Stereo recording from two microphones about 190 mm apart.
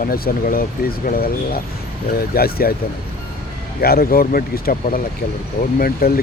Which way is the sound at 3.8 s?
50° left (ahead or behind).